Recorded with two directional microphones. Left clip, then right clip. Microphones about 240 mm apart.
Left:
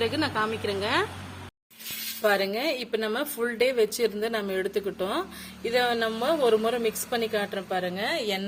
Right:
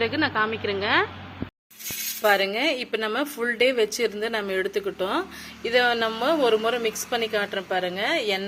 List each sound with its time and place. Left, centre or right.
0.0 s speech: centre
2.2 s speech: centre